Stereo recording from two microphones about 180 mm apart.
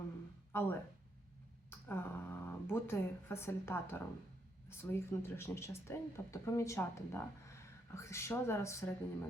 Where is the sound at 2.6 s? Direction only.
15° left (ahead or behind).